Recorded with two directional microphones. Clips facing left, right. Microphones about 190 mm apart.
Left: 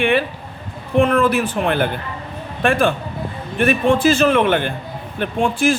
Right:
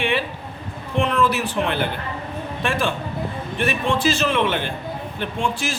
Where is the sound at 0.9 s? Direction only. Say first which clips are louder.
Left 5 dB; 55° left (ahead or behind).